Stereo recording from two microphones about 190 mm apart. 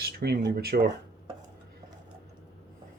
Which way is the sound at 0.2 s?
60° right (ahead or behind).